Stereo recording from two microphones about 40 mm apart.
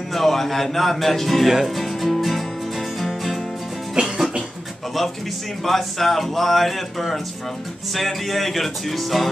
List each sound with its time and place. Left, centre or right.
0.1 s speech: centre
3.0 s music: centre
4.0 s music: right
5.6 s speech: centre